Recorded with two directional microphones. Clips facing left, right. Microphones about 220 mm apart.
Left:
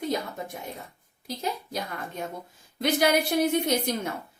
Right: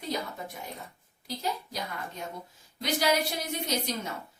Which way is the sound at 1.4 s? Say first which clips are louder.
Left 3 dB; 55° left (ahead or behind).